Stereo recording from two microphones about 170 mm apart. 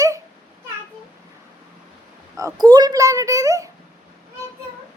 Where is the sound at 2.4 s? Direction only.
20° right (ahead or behind).